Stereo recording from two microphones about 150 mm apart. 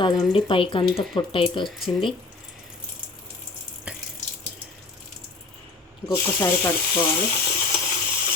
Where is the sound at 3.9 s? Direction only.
10° right (ahead or behind).